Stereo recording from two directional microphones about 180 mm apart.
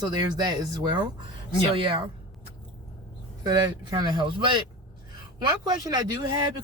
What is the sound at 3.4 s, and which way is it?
Speech, 25° right (ahead or behind).